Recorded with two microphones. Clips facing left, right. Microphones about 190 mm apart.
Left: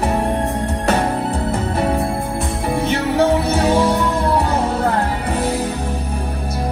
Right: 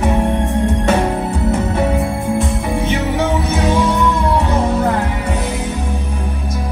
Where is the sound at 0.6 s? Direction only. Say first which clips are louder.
Right 4 dB; 35° left (ahead or behind).